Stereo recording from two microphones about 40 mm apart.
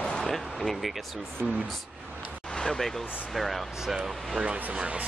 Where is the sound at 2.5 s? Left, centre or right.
Centre.